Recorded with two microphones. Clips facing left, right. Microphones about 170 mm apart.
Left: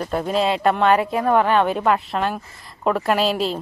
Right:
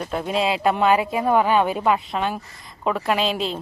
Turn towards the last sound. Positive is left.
turn(degrees=5)  # may be behind; listen again after turning